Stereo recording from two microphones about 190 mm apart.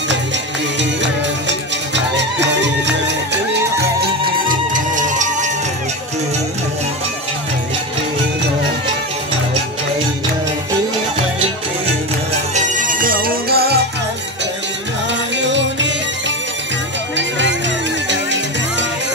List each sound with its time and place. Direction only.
2.1 s music: 70° right (ahead or behind)
4.0 s music: 50° right (ahead or behind)
12.5 s music: 45° right (ahead or behind)
15.4 s music: 70° right (ahead or behind)
18.0 s music: 70° right (ahead or behind)